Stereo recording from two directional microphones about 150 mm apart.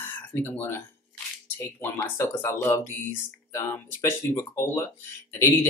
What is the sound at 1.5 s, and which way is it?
Speech, 15° left (ahead or behind).